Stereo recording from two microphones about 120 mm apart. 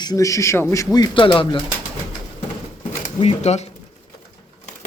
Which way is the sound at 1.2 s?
45° left (ahead or behind).